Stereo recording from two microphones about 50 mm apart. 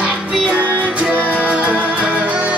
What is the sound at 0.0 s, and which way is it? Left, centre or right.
Music, right.